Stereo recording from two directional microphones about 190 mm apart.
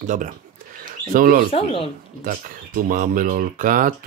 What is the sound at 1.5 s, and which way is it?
Speech, 30° left (ahead or behind).